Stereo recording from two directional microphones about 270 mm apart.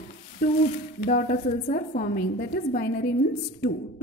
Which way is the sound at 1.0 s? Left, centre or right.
Left.